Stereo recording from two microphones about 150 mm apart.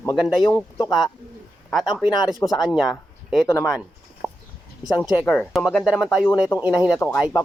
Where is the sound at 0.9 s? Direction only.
Centre (ahead or behind).